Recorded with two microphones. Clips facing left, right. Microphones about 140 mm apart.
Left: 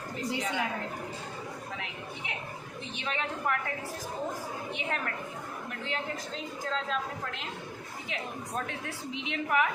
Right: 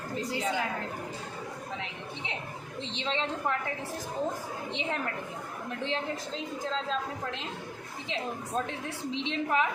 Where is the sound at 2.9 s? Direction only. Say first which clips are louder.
Right 2 dB; 25° right (ahead or behind).